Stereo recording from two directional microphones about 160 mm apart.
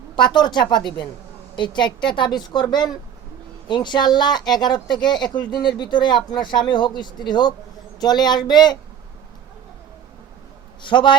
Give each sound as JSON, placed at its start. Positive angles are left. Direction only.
{"t": 0.2, "sound": "speech", "side_deg": 30}
{"t": 10.8, "sound": "speech", "side_deg": 30}